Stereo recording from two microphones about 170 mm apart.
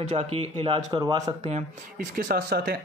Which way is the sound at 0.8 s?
20° right (ahead or behind).